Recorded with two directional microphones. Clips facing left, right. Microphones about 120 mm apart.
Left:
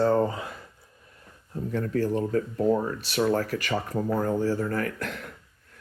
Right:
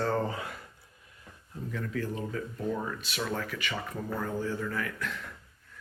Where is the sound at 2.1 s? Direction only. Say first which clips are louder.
Left 9 dB; 50° left (ahead or behind).